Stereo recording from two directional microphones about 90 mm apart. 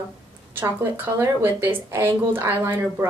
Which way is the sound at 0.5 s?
25° right (ahead or behind).